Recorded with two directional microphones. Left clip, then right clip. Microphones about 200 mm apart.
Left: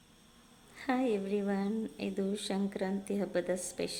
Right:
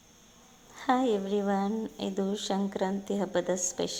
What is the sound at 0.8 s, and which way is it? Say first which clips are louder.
A woman's voice: right 6 dB; centre (ahead or behind).